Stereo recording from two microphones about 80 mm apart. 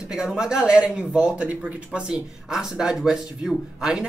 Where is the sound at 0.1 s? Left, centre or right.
Centre.